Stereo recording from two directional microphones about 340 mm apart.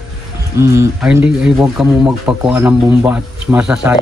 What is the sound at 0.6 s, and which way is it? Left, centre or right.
Speech, centre.